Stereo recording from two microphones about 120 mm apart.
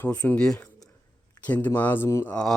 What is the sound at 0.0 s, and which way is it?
Speech, 15° left (ahead or behind).